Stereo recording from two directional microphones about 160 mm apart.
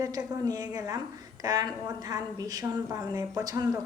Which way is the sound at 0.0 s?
20° right (ahead or behind).